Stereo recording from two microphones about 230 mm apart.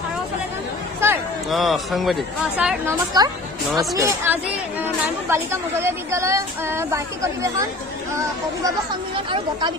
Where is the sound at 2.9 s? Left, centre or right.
Centre.